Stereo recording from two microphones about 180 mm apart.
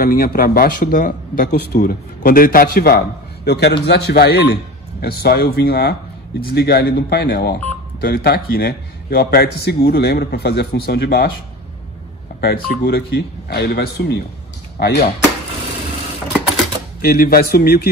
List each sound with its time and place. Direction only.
0.0 s a man's voice: 55° left (ahead or behind)
12.4 s a man's voice: 60° left (ahead or behind)
17.0 s a man's voice: 55° left (ahead or behind)